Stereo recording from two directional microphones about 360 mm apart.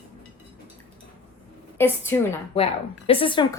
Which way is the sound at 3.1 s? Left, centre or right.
Centre.